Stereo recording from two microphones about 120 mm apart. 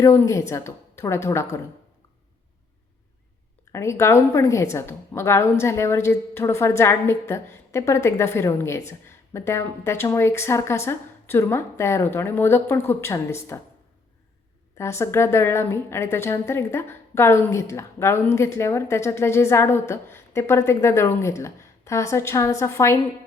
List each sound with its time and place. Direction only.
0.0 s a woman's voice: 25° left (ahead or behind)
3.7 s a woman's voice: 25° left (ahead or behind)
14.8 s a woman's voice: 25° left (ahead or behind)